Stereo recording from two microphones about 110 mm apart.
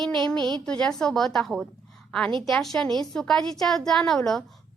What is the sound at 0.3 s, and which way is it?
Speech, 40° right (ahead or behind).